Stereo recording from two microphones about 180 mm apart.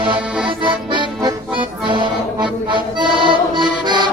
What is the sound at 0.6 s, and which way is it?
Accordion, 25° right (ahead or behind).